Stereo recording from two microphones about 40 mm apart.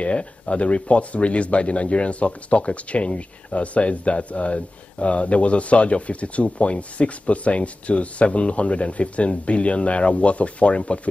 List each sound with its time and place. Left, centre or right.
0.0 s speech: left